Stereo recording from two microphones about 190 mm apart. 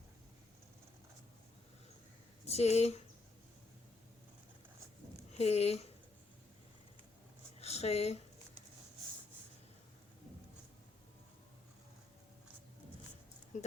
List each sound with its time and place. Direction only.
2.5 s speech: 35° left (ahead or behind)
5.4 s speech: 35° left (ahead or behind)
7.6 s speech: 35° left (ahead or behind)
13.5 s speech: 40° left (ahead or behind)